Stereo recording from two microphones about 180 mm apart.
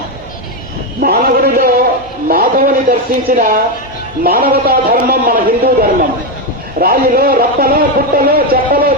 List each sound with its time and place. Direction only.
1.0 s a man's voice: 55° right (ahead or behind)